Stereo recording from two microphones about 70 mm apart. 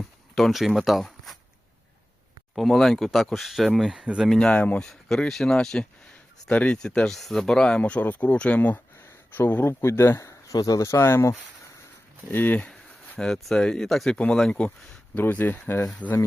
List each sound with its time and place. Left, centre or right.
0.3 s speech: centre
2.6 s speech: centre
3.8 s speech: centre
4.3 s speech: centre
4.5 s speech: left
4.8 s speech: centre
7.8 s speech: centre
9.0 s a sound: left
9.8 s speech: left
10.2 s speech: left
12.3 s speech: left
13.1 s speech: centre
14.6 s speech: centre
15.1 s speech: left